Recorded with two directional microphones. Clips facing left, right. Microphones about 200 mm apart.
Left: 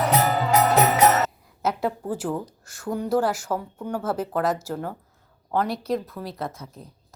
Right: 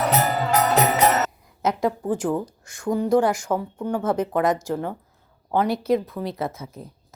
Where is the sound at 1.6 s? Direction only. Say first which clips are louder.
Right 3 dB; 5° left (ahead or behind).